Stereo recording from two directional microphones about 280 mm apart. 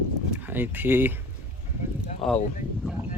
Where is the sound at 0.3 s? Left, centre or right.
Centre.